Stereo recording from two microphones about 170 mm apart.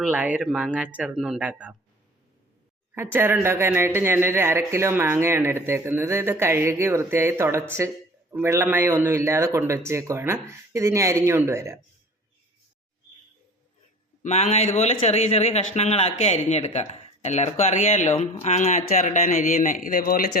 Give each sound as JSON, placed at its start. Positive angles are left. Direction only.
{"t": 0.0, "sound": "speech", "side_deg": -10}
{"t": 2.9, "sound": "speech", "side_deg": -15}
{"t": 14.2, "sound": "a man's voice", "side_deg": 40}